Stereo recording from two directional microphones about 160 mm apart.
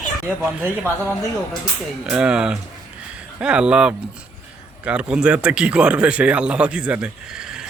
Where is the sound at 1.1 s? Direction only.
20° left (ahead or behind).